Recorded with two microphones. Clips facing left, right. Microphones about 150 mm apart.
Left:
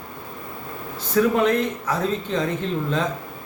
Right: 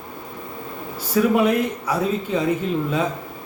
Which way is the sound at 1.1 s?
10° right (ahead or behind).